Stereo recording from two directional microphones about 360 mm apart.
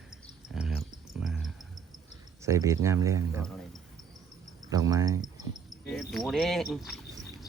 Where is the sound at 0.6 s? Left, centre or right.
Centre.